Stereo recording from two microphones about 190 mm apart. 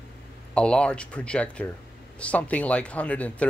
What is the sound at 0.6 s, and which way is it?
Speech, 5° left (ahead or behind).